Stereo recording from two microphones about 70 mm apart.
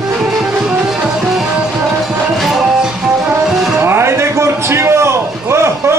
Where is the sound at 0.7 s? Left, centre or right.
Centre.